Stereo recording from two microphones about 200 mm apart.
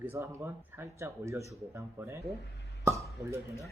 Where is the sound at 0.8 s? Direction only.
15° right (ahead or behind).